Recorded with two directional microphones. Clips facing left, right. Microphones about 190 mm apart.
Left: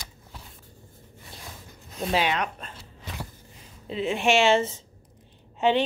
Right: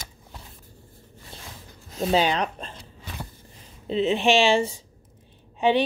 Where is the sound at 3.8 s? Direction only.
25° right (ahead or behind).